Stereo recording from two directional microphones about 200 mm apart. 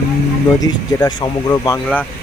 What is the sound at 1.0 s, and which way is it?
Speech, 20° left (ahead or behind).